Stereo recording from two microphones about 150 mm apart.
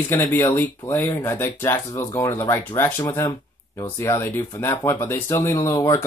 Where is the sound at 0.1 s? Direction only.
15° left (ahead or behind).